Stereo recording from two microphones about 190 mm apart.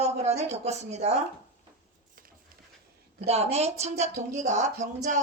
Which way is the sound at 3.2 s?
35° right (ahead or behind).